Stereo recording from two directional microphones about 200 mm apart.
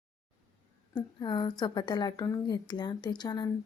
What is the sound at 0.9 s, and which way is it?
A woman's voice, 20° left (ahead or behind).